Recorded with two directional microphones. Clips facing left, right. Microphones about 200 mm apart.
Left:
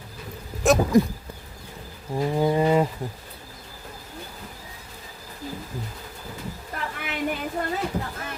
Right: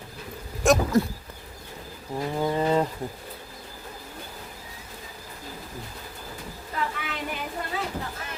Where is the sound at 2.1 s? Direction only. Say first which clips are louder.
Left 4 dB; 15° left (ahead or behind).